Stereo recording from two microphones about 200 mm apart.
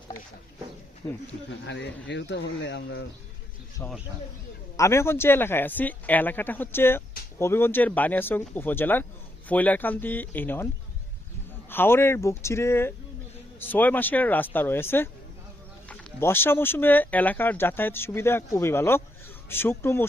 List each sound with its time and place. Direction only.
1.0 s speech: 20° left (ahead or behind)
1.5 s speech: 60° left (ahead or behind)
4.8 s speech: 15° left (ahead or behind)
11.7 s speech: 10° left (ahead or behind)